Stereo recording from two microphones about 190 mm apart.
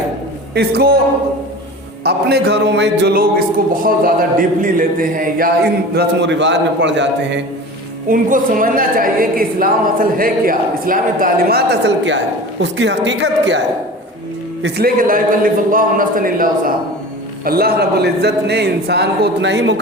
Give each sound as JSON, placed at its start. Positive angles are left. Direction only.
{"t": 0.5, "sound": "a man's voice", "side_deg": -55}
{"t": 2.0, "sound": "a man's voice", "side_deg": -60}
{"t": 5.9, "sound": "a man's voice", "side_deg": -65}
{"t": 8.1, "sound": "a woman's voice", "side_deg": -45}
{"t": 14.6, "sound": "a woman's voice", "side_deg": -55}